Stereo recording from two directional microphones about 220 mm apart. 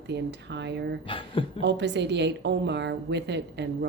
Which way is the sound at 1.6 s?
50° right (ahead or behind).